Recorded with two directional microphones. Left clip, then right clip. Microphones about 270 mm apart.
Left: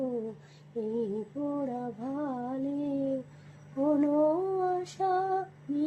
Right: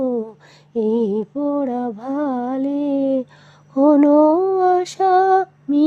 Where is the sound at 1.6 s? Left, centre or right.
Right.